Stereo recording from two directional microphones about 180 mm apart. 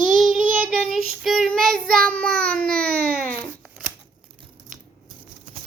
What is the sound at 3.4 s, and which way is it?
Shuffling cards, 10° right (ahead or behind).